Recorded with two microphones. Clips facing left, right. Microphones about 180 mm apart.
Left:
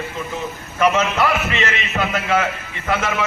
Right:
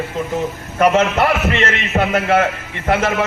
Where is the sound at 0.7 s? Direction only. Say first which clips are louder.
Right 4 dB; 55° right (ahead or behind).